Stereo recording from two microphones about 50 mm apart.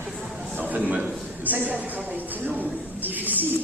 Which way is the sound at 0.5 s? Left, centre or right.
Right.